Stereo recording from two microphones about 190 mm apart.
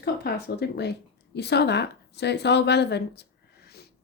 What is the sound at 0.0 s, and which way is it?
Speech, 60° left (ahead or behind).